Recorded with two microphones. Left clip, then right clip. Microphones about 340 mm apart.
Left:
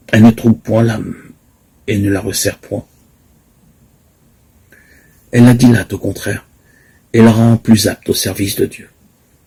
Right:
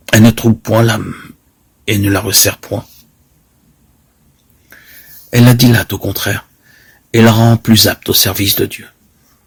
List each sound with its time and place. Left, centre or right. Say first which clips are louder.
0.0 s speech: even; right
5.3 s speech: even; right